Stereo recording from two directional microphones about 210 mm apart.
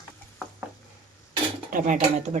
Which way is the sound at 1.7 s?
40° right (ahead or behind).